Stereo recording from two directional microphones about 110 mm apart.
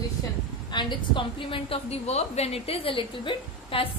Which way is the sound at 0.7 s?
45° left (ahead or behind).